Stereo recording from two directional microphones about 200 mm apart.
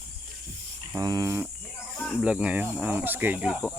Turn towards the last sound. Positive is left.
turn(degrees=-5)  # may be behind; listen again after turning